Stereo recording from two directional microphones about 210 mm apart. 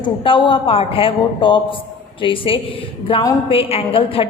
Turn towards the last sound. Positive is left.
turn(degrees=25)  # may be behind; listen again after turning